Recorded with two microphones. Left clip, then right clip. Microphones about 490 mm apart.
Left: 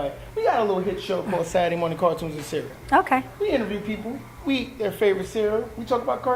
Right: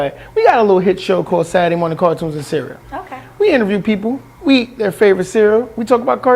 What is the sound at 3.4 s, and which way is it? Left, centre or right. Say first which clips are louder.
Speech: right 11 dB; right.